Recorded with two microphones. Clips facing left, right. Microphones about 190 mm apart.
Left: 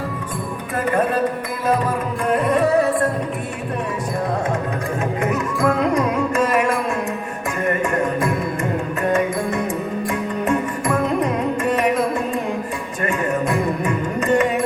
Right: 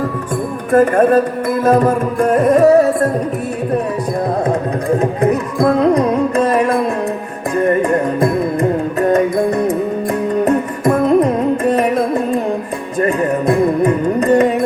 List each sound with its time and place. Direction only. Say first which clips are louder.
0.7 s music: right 10 dB; 50° right (ahead or behind)
4.9 s music: right 6 dB; 35° right (ahead or behind)